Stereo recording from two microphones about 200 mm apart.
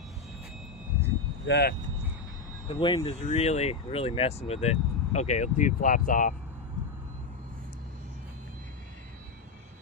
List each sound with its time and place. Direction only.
1.5 s speech: 55° left (ahead or behind)
2.6 s speech: 25° left (ahead or behind)